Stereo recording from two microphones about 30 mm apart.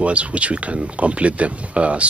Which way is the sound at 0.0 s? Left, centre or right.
Right.